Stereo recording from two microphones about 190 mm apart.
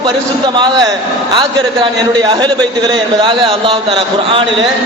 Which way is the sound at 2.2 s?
20° right (ahead or behind).